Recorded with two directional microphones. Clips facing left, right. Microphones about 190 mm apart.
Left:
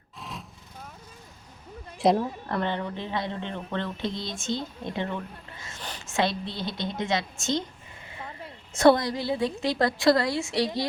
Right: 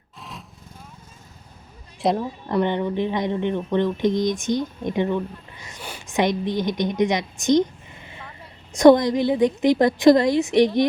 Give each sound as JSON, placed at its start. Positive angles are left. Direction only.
{"t": 0.2, "sound": "vehicle", "side_deg": 0}
{"t": 2.0, "sound": "a woman's voice", "side_deg": 0}
{"t": 2.5, "sound": "speech", "side_deg": -15}
{"t": 8.7, "sound": "a woman's voice", "side_deg": -15}